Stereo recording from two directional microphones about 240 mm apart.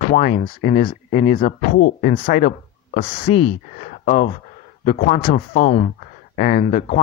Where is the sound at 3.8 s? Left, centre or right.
Left.